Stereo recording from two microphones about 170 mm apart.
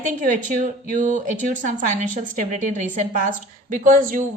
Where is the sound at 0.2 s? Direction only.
50° right (ahead or behind).